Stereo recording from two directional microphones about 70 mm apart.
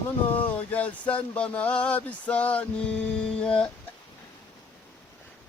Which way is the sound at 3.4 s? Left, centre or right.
Centre.